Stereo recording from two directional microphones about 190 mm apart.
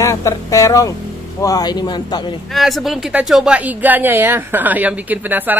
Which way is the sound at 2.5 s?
Centre (ahead or behind).